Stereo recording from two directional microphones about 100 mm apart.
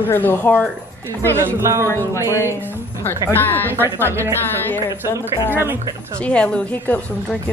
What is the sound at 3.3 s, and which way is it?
Speech, 20° left (ahead or behind).